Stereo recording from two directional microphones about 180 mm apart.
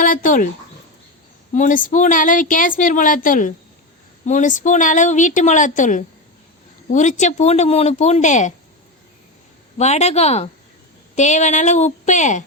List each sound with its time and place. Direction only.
0.0 s speech: 50° left (ahead or behind)
1.5 s a woman's voice: 45° left (ahead or behind)
9.7 s speech: 35° left (ahead or behind)